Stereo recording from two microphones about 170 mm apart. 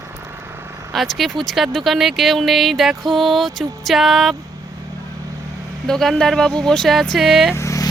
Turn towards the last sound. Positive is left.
turn(degrees=20)  # may be behind; listen again after turning